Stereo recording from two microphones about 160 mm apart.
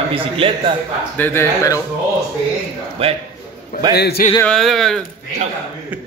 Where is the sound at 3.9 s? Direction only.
90° left.